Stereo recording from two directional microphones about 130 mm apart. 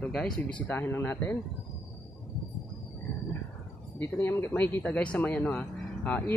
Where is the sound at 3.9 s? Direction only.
15° left (ahead or behind).